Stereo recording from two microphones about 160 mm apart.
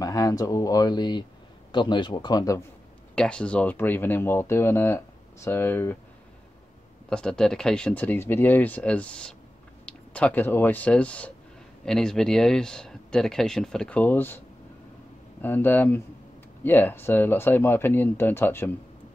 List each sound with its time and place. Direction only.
0.0 s speech: 20° left (ahead or behind)
3.2 s speech: 5° left (ahead or behind)
7.1 s speech: 5° left (ahead or behind)
15.4 s speech: 10° left (ahead or behind)